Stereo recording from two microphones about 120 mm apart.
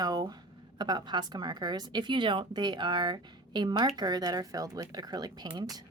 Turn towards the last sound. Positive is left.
turn(degrees=-35)  # may be behind; listen again after turning